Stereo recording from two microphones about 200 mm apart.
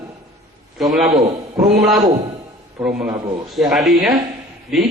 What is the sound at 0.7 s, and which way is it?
Speech, centre (ahead or behind).